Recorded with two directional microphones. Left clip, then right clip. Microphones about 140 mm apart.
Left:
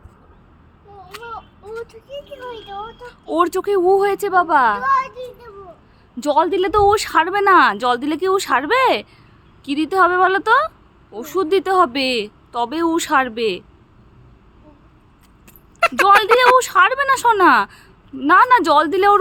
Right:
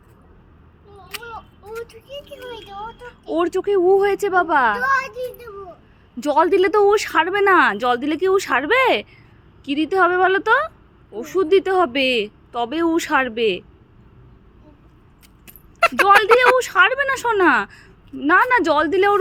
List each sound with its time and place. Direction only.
1.2 s speech: 10° left (ahead or behind)
3.3 s speech: 15° left (ahead or behind)
3.9 s speech: centre (ahead or behind)
4.8 s a child's voice: 50° right (ahead or behind)
6.1 s a woman's voice: 5° right (ahead or behind)
6.7 s speech: 5° left (ahead or behind)
15.4 s speech: centre (ahead or behind)